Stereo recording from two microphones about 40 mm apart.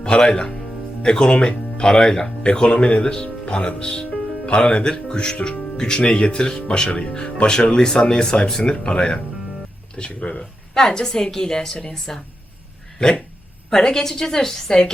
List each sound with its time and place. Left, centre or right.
0.0 s a woman's voice: left
10.8 s a woman's voice: centre